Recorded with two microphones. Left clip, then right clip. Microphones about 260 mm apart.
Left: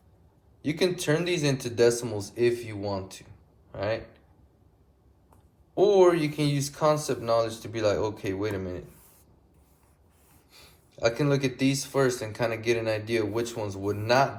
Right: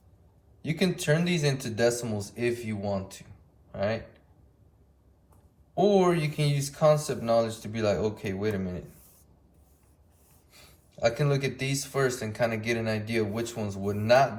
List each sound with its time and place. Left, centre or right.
0.6 s speech: left
5.7 s speech: left
10.6 s speech: left